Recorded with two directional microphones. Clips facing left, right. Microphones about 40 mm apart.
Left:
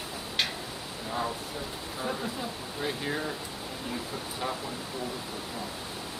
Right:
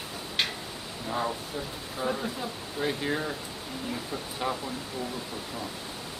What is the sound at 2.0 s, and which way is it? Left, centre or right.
Speech, centre.